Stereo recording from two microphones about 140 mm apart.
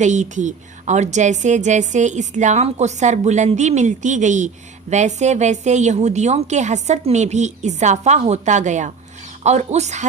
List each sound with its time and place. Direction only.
0.0 s a woman's voice: 60° right (ahead or behind)